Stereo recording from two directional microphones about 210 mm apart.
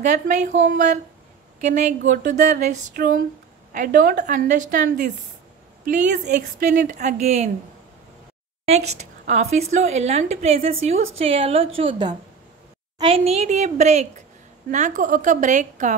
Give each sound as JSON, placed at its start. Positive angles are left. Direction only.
{"t": 0.0, "sound": "a woman's voice", "side_deg": -35}
{"t": 8.6, "sound": "a woman's voice", "side_deg": -30}